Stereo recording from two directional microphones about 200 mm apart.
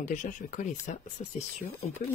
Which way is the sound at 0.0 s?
40° left (ahead or behind).